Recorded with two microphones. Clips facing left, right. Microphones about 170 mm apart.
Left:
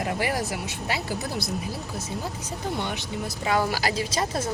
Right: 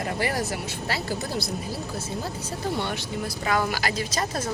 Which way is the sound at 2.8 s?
20° left (ahead or behind).